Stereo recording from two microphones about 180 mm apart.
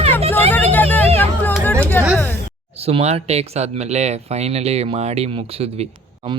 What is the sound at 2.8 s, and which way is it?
Speech, 35° right (ahead or behind).